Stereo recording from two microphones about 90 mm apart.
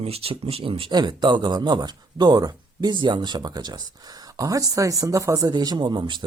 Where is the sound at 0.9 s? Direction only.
55° right (ahead or behind).